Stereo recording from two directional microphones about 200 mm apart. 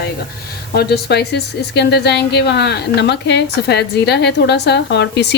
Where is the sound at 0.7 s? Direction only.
55° left (ahead or behind).